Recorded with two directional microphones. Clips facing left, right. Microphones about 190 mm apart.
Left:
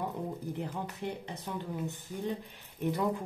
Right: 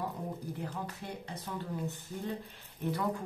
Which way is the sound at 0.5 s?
20° left (ahead or behind).